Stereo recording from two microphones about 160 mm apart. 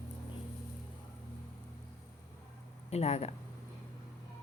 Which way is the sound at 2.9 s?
40° left (ahead or behind).